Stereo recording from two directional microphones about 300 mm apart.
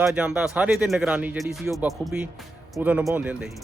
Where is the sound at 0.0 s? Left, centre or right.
Centre.